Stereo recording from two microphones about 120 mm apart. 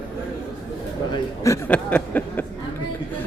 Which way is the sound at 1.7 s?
10° left (ahead or behind).